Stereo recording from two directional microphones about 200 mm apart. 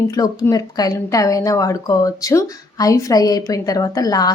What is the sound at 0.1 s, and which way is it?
A woman's voice, 15° left (ahead or behind).